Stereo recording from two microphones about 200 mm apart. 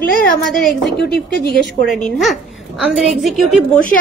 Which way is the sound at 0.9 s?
55° left (ahead or behind).